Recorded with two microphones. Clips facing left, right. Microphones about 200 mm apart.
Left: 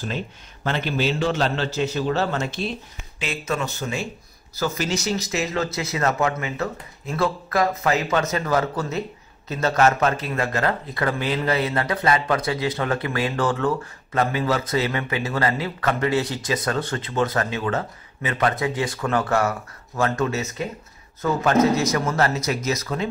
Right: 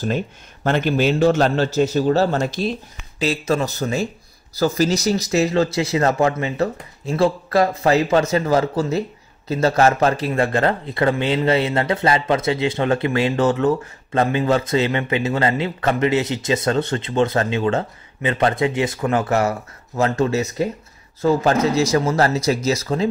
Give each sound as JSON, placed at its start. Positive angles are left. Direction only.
{"t": 0.7, "sound": "a man's voice", "side_deg": -50}
{"t": 20.0, "sound": "speech", "side_deg": -30}